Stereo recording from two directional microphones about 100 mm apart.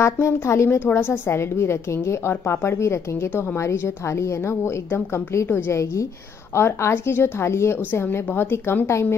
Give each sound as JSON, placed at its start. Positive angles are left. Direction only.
{"t": 0.0, "sound": "a woman's voice", "side_deg": 25}